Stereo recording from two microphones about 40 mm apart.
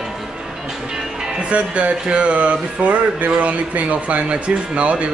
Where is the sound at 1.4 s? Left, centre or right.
Right.